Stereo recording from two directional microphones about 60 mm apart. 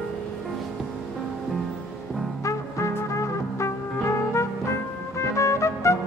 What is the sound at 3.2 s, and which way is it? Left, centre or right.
Music, left.